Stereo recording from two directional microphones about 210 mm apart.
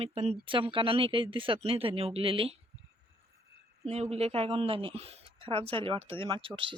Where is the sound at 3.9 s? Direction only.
30° right (ahead or behind).